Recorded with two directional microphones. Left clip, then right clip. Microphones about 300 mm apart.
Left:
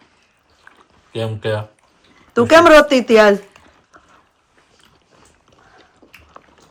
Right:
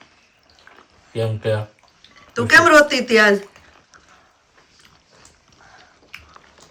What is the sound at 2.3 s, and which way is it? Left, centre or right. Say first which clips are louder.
A woman's voice: left 3 dB; centre.